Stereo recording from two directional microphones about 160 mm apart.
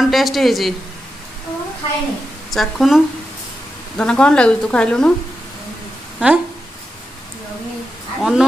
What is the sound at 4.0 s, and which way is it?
Speech, 5° left (ahead or behind).